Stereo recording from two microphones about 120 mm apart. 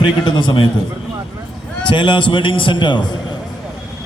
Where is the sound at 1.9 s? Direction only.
40° left (ahead or behind).